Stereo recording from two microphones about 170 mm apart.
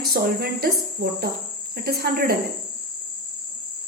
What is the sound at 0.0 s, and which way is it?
Speech, 65° right (ahead or behind).